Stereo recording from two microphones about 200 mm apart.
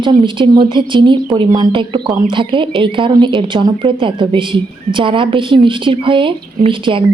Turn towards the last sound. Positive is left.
turn(degrees=-25)  # may be behind; listen again after turning